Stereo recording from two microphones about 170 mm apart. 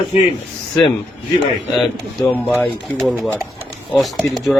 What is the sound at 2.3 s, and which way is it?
Speech, 10° left (ahead or behind).